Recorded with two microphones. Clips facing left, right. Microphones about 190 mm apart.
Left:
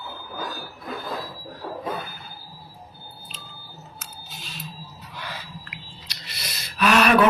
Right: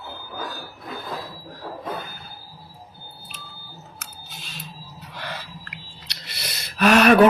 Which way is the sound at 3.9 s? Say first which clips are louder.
Left 1 dB; 55° right (ahead or behind).